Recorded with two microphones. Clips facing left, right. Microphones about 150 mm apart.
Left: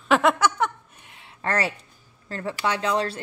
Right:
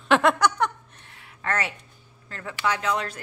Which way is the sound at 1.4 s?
35° left (ahead or behind).